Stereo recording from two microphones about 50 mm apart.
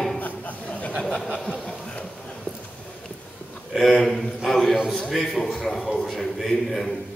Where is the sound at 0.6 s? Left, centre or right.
Left.